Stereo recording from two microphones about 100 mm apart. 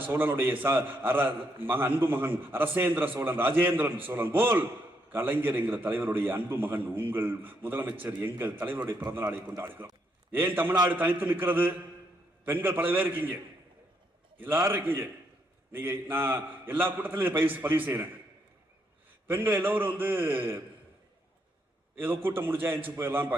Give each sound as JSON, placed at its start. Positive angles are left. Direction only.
{"t": 0.0, "sound": "a man's voice", "side_deg": -20}
{"t": 19.3, "sound": "a man's voice", "side_deg": -20}
{"t": 21.9, "sound": "a man's voice", "side_deg": -20}